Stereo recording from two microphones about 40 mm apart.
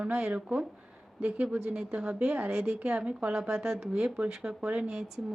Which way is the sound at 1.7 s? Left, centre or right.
Right.